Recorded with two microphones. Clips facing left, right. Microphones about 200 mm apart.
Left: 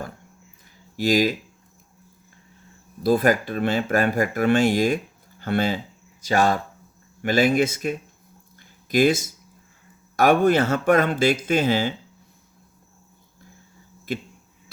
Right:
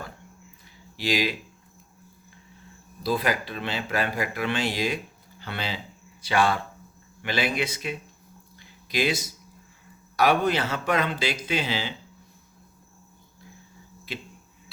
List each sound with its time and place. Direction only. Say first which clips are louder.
0.9 s speech: left 7 dB; 45° left (ahead or behind)
3.0 s speech: left 7 dB; 50° left (ahead or behind)
8.5 s a sound: left 8 dB; 50° left (ahead or behind)
10.2 s speech: left 5 dB; 50° left (ahead or behind)
14.1 s speech: left 8 dB; 50° left (ahead or behind)